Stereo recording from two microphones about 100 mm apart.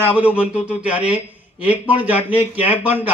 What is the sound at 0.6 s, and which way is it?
Speech, 15° right (ahead or behind).